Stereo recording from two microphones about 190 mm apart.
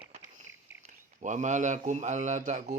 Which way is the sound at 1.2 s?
40° right (ahead or behind).